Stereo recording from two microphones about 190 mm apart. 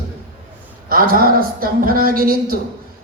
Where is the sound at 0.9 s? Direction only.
50° right (ahead or behind).